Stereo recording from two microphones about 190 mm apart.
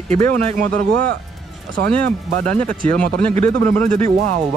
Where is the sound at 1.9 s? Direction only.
5° left (ahead or behind).